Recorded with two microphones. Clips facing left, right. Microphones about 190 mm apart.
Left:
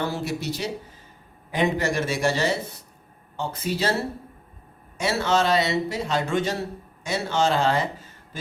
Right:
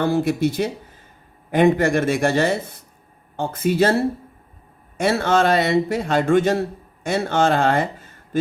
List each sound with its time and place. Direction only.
0.0 s speech: 55° right (ahead or behind)
4.9 s speech: 55° right (ahead or behind)